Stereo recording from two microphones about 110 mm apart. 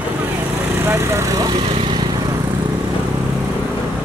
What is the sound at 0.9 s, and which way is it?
Speech, 25° right (ahead or behind).